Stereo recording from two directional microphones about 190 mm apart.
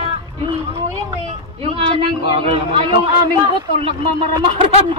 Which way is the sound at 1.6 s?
30° right (ahead or behind).